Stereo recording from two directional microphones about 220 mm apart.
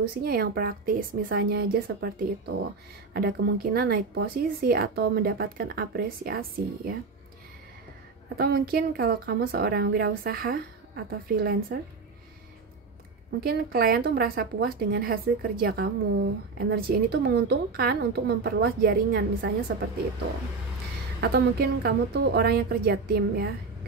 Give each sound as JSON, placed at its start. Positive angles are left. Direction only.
{"t": 0.2, "sound": "a woman's voice", "side_deg": -40}
{"t": 8.4, "sound": "speech", "side_deg": -45}
{"t": 13.4, "sound": "speech", "side_deg": -45}
{"t": 21.2, "sound": "speech", "side_deg": -45}